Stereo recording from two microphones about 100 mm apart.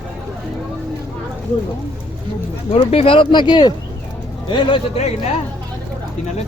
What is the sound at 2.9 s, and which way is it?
Speech, 70° left (ahead or behind).